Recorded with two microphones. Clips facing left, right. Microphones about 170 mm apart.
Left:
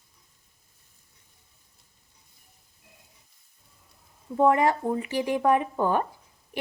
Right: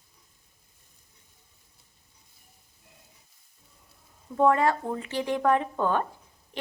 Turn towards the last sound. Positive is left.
turn(degrees=10)  # may be behind; listen again after turning